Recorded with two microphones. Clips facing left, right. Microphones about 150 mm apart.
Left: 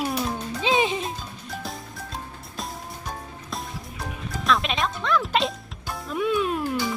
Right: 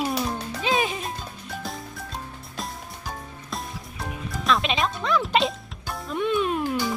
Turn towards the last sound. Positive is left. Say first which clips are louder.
# right 1 dB
turn(degrees=0)  # may be behind; listen again after turning